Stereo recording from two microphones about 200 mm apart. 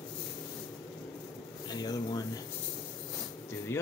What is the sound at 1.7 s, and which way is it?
Speech, 20° left (ahead or behind).